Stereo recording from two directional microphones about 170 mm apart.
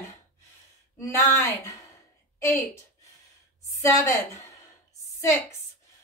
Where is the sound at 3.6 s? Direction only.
15° left (ahead or behind).